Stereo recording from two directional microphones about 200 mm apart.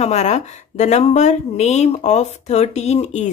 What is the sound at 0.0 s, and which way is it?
A woman's voice, 35° left (ahead or behind).